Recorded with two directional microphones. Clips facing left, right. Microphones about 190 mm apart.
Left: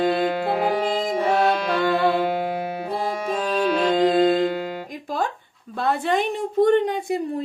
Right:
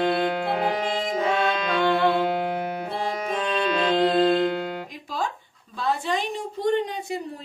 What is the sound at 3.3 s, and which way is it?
Music, 5° left (ahead or behind).